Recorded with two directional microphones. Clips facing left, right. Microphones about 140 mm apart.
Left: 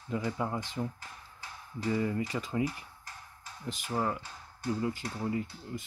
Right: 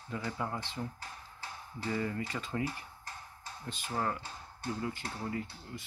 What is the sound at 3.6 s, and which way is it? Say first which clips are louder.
Speech: left 3 dB; 15° left (ahead or behind).